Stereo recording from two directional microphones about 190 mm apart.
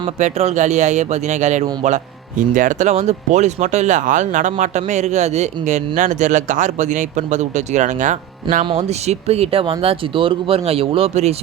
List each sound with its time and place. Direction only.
0.2 s speech: 35° right (ahead or behind)